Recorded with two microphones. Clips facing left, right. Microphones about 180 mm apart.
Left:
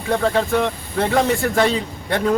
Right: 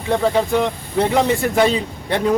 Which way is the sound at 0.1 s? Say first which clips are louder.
Right 1 dB; 15° right (ahead or behind).